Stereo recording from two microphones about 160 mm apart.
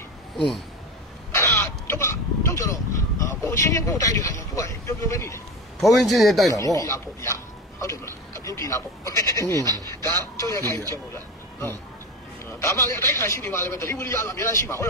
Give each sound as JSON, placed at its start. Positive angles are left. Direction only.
{"t": 1.3, "sound": "speech", "side_deg": 15}
{"t": 5.9, "sound": "speech", "side_deg": 0}
{"t": 6.5, "sound": "speech", "side_deg": 20}
{"t": 10.7, "sound": "a man's voice", "side_deg": -20}
{"t": 12.5, "sound": "a man's voice", "side_deg": 15}